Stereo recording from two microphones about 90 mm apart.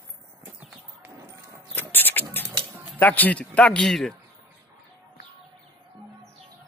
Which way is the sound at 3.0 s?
20° left (ahead or behind).